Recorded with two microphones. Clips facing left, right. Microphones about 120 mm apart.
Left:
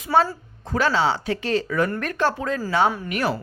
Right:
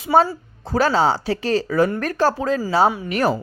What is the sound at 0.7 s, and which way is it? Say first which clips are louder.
Speech: right 3 dB; 40° right (ahead or behind).